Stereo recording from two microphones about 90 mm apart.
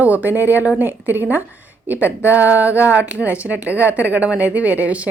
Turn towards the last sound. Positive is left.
turn(degrees=-15)  # may be behind; listen again after turning